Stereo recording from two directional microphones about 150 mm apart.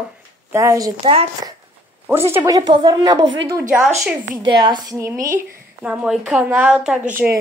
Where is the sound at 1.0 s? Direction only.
35° right (ahead or behind).